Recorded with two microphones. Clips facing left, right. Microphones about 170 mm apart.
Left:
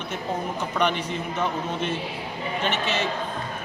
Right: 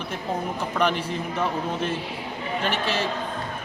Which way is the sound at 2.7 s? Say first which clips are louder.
Even; 35° right (ahead or behind).